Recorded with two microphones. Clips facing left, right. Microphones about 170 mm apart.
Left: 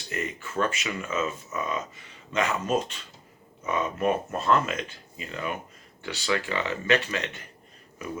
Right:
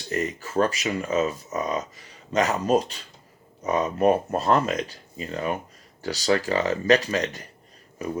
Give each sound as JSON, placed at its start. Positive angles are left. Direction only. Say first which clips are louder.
{"t": 0.1, "sound": "speech", "louder": "right 6 dB", "side_deg": -35}